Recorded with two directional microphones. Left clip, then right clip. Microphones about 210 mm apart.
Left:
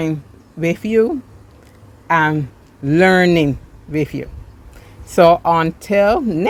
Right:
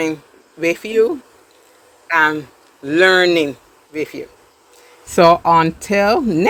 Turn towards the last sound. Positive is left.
turn(degrees=-5)  # may be behind; listen again after turning